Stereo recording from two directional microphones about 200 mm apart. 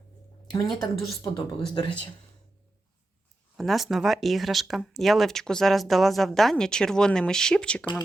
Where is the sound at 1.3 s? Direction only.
20° left (ahead or behind).